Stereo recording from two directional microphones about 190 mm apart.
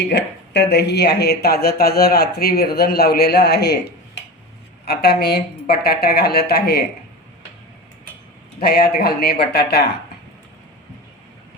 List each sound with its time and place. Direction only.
0.1 s speech: 60° left (ahead or behind)
8.6 s speech: 55° left (ahead or behind)